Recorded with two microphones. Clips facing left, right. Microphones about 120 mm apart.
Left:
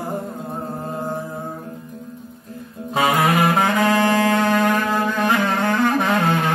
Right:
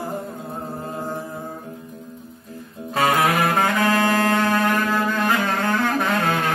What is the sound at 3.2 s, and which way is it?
Saxophone, 15° left (ahead or behind).